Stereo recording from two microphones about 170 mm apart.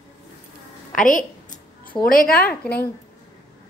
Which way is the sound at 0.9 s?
50° left (ahead or behind).